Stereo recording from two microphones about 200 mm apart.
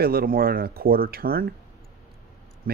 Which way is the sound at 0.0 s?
50° right (ahead or behind).